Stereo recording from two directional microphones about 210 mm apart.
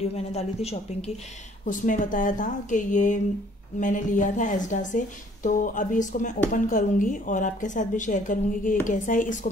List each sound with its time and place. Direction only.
0.0 s a woman's voice: 30° left (ahead or behind)